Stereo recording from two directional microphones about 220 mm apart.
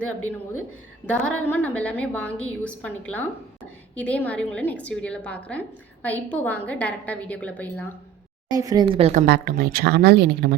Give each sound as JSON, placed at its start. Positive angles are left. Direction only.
{"t": 1.2, "sound": "a woman's voice", "side_deg": 5}
{"t": 8.4, "sound": "speech", "side_deg": -15}
{"t": 9.2, "sound": "speech", "side_deg": -45}